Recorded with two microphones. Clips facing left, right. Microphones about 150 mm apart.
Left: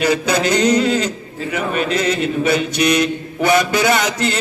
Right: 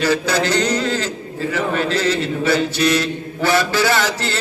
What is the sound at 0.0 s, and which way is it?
A man's voice, 20° left (ahead or behind).